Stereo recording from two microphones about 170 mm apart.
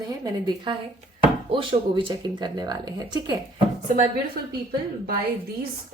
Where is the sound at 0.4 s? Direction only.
30° right (ahead or behind).